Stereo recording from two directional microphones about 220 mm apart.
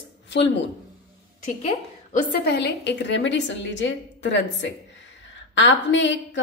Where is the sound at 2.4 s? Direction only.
50° left (ahead or behind).